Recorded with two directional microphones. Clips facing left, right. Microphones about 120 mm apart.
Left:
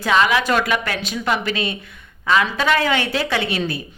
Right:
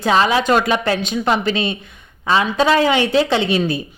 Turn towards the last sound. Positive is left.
turn(degrees=-20)  # may be behind; listen again after turning